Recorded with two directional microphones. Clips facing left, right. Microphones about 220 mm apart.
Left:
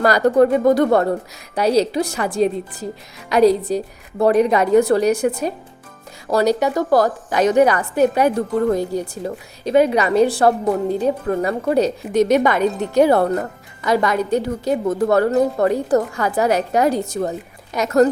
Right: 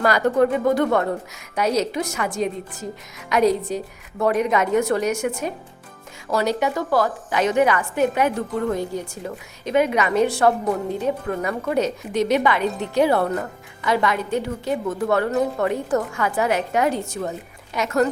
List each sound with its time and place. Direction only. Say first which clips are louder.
0.0 s a woman's voice: left 4 dB; 40° left (ahead or behind)